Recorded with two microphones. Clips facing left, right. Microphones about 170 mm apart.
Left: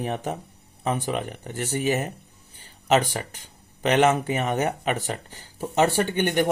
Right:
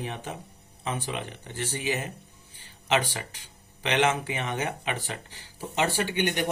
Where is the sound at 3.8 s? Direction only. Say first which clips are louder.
Left 5 dB; 45° left (ahead or behind).